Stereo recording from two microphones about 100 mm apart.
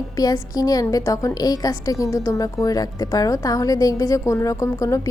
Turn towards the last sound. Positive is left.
turn(degrees=30)  # may be behind; listen again after turning